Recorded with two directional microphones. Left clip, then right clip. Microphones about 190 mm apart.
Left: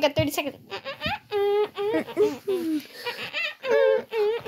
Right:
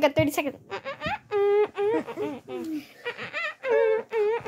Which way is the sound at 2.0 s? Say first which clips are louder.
Left 9 dB; 5° right (ahead or behind).